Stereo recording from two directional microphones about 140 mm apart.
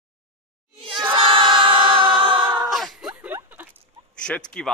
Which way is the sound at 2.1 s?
35° right (ahead or behind).